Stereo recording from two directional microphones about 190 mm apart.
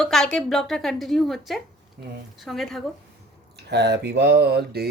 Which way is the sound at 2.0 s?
50° right (ahead or behind).